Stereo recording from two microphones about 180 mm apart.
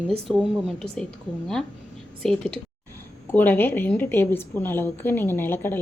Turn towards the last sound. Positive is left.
turn(degrees=10)  # may be behind; listen again after turning